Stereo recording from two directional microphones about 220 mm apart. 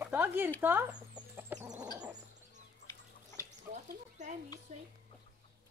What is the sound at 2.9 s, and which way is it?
Chicken, 15° left (ahead or behind).